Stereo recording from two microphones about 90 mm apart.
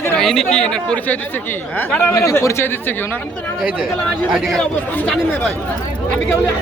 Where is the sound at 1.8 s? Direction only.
25° left (ahead or behind).